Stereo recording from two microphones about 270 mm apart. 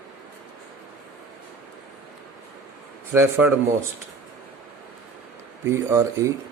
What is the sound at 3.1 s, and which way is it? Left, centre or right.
Speech, centre.